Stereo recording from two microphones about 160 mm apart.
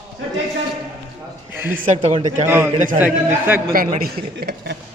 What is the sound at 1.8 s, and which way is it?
Speech, 50° right (ahead or behind).